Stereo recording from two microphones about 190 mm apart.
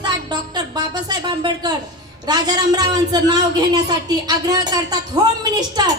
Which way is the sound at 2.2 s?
20° right (ahead or behind).